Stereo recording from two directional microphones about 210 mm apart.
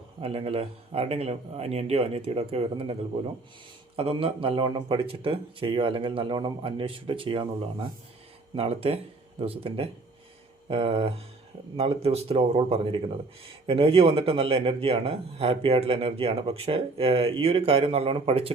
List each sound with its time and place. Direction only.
0.2 s speech: 25° right (ahead or behind)
3.9 s speech: 25° right (ahead or behind)